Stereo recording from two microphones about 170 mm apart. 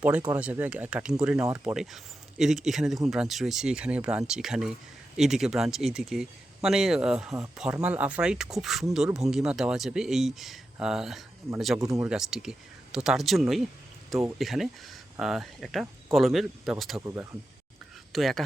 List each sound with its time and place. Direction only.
0.0 s speech: 10° right (ahead or behind)
11.8 s speech: 20° right (ahead or behind)
12.0 s speech: 5° right (ahead or behind)
18.1 s speech: centre (ahead or behind)